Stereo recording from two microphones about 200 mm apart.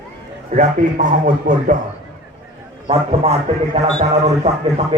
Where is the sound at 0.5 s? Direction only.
40° right (ahead or behind).